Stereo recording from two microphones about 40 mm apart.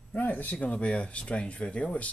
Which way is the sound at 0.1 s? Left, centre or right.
Left.